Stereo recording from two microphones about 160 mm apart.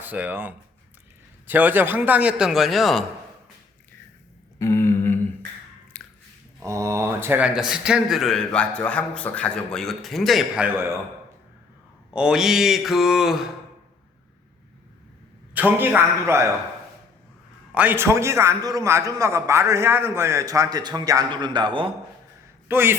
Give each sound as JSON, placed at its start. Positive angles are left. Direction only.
{"t": 0.0, "sound": "a man's voice", "side_deg": -10}
{"t": 4.5, "sound": "a sound", "side_deg": 15}
{"t": 5.9, "sound": "squish", "side_deg": 10}
{"t": 6.6, "sound": "speech", "side_deg": -20}
{"t": 12.1, "sound": "speech", "side_deg": -5}
{"t": 15.5, "sound": "a man's voice", "side_deg": -10}
{"t": 17.7, "sound": "a man's voice", "side_deg": -10}
{"t": 22.7, "sound": "a man's voice", "side_deg": -15}